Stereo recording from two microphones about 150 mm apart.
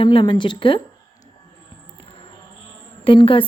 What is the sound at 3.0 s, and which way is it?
Speech, 35° left (ahead or behind).